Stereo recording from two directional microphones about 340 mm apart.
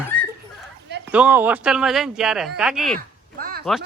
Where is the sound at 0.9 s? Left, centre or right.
Right.